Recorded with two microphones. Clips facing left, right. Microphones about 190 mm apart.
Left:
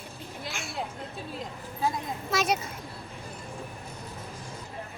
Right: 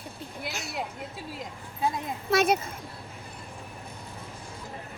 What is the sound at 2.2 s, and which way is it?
Speech, 55° right (ahead or behind).